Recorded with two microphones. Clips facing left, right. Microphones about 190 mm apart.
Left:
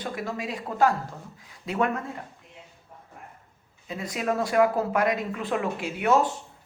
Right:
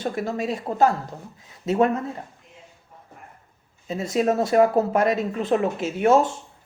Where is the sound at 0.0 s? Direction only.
25° right (ahead or behind).